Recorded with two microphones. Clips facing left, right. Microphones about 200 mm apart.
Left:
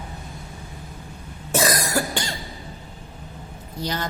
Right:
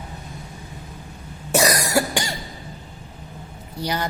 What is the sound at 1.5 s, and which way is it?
Cough, 15° right (ahead or behind).